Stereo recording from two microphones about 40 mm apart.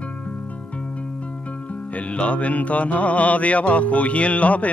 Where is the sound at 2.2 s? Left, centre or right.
Left.